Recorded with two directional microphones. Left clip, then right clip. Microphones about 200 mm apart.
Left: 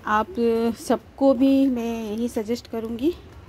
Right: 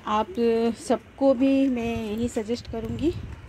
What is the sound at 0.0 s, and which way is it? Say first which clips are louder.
Speech: left 3 dB; 10° left (ahead or behind).